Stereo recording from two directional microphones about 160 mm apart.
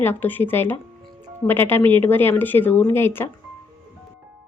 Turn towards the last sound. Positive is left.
turn(degrees=15)  # may be behind; listen again after turning